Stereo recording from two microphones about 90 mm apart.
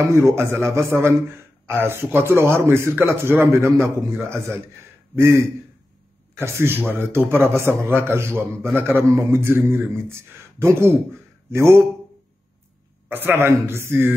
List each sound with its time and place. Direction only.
0.0 s a man's voice: 35° right (ahead or behind)
13.1 s a man's voice: 25° right (ahead or behind)